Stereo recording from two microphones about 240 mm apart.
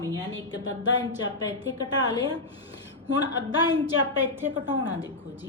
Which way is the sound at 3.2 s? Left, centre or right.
Centre.